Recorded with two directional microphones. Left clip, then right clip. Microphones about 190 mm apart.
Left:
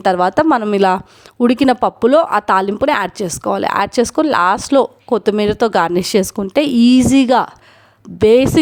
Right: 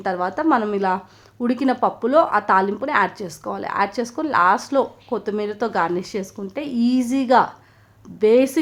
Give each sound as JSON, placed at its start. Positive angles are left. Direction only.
{"t": 0.0, "sound": "speech", "side_deg": 45}